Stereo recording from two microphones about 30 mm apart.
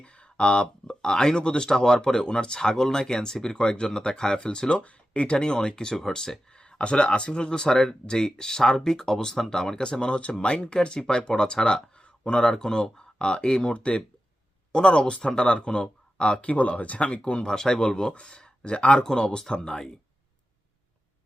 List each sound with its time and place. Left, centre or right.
0.0 s a sound: left
1.1 s speech: centre
4.8 s speech: left; by 6.4 s centre
6.5 s speech: left
7.5 s speech: centre
10.9 s speech: left
11.2 s speech: left
12.4 s speech: centre; by 17.5 s left
17.5 s speech: left
18.1 s speech: left
18.9 s speech: left